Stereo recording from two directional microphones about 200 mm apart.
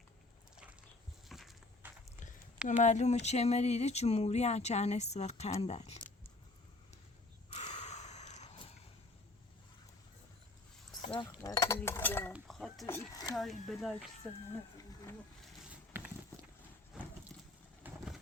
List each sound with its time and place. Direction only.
1.3 s walk: centre (ahead or behind)
2.6 s speech: 35° left (ahead or behind)
7.5 s gasp: 35° left (ahead or behind)
11.0 s a sound: 25° left (ahead or behind)
11.8 s chink: 10° left (ahead or behind)
12.3 s cutlery: centre (ahead or behind)
12.8 s speech: 15° left (ahead or behind)
13.3 s speech: centre (ahead or behind)
15.9 s walk: 10° right (ahead or behind)
17.3 s a sound: centre (ahead or behind)
17.8 s a sound: 10° right (ahead or behind)